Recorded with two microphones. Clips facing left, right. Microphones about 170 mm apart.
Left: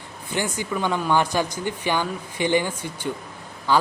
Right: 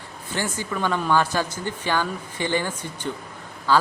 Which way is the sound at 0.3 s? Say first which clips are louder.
Left 2 dB; 15° left (ahead or behind).